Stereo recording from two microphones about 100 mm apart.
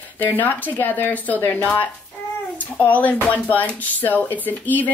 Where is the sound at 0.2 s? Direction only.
20° left (ahead or behind).